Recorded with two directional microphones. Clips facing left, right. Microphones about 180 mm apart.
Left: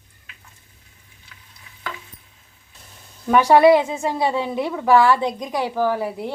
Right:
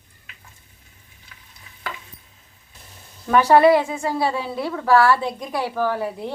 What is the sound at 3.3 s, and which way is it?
A woman's voice, 15° left (ahead or behind).